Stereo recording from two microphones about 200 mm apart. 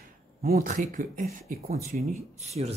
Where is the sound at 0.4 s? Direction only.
45° right (ahead or behind).